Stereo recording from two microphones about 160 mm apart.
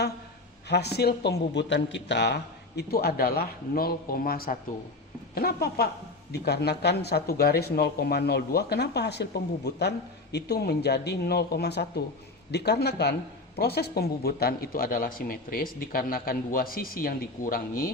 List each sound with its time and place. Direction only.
0.7 s a man's voice: 90° left
6.3 s speech: 90° left; by 17.9 s 65° left (ahead or behind)